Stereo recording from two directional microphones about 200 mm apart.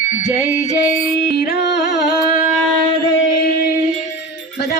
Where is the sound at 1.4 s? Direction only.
55° left (ahead or behind).